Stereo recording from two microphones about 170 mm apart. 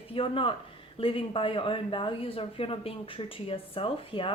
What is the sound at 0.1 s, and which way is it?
A woman's voice, 30° left (ahead or behind).